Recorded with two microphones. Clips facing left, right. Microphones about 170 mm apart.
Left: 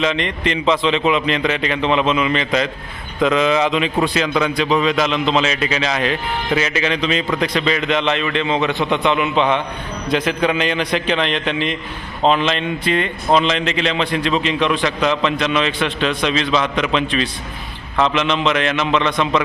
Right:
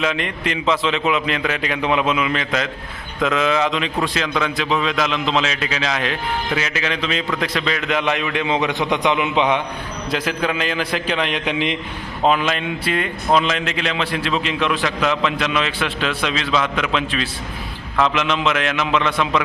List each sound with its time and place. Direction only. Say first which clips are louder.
0.0 s a man's voice: left 3 dB; 5° right (ahead or behind)
10.1 s a man's voice: left 4 dB; 5° right (ahead or behind)